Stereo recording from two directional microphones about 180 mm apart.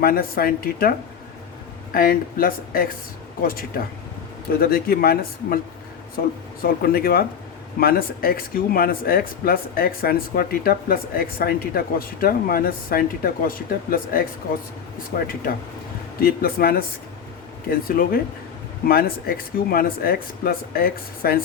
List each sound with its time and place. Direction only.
0.0 s speech: 55° left (ahead or behind)